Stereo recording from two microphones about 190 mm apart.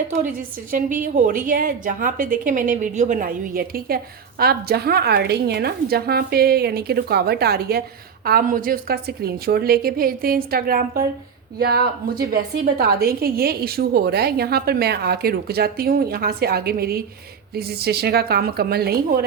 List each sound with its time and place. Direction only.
0.2 s a woman's voice: 45° right (ahead or behind)